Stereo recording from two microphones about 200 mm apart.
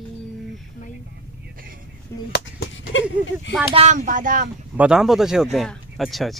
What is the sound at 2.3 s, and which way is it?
Chop, 55° left (ahead or behind).